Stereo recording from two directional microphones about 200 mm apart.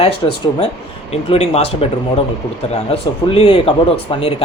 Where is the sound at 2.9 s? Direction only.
25° left (ahead or behind).